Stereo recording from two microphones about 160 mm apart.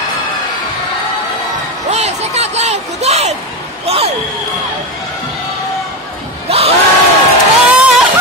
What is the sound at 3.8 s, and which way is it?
Basketball bounce, 40° right (ahead or behind).